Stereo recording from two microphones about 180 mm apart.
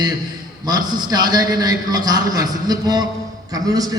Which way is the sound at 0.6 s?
25° right (ahead or behind).